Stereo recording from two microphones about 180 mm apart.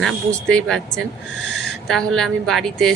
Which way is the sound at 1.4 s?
70° left (ahead or behind).